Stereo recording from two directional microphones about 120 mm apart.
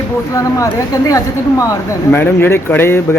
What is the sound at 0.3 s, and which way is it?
Speech, 25° left (ahead or behind).